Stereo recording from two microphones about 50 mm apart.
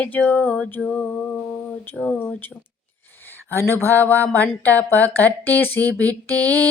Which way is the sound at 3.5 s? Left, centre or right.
Left.